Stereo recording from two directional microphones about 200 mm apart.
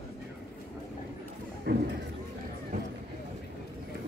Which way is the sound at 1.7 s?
55° right (ahead or behind).